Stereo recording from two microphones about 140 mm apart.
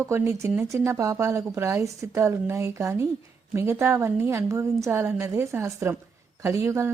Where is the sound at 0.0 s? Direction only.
20° right (ahead or behind).